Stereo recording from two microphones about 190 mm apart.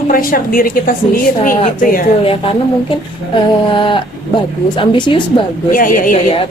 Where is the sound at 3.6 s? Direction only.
25° left (ahead or behind).